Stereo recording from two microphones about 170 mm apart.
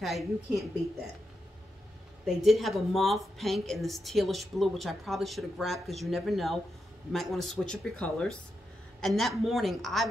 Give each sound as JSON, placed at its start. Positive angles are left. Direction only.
{"t": 0.0, "sound": "a woman's voice", "side_deg": 0}
{"t": 2.2, "sound": "a woman's voice", "side_deg": 0}